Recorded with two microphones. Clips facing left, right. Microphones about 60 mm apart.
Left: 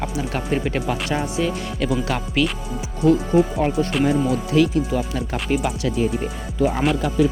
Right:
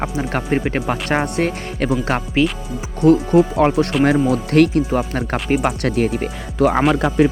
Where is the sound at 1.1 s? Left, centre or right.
Right.